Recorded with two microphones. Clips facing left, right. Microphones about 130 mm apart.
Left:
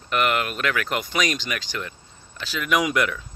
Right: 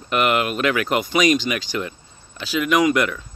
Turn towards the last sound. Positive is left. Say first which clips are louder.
# right 5 dB
turn(degrees=0)  # may be behind; listen again after turning